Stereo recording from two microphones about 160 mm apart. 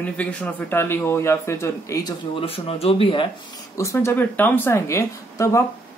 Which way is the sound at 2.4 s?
40° left (ahead or behind).